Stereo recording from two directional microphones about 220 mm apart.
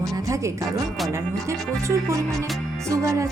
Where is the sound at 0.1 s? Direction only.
15° right (ahead or behind).